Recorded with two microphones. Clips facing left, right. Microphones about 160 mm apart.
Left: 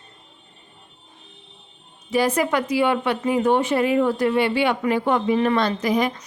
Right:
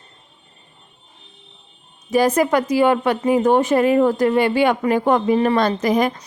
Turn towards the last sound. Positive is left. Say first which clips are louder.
# right 3 dB
turn(degrees=-45)  # may be behind; listen again after turning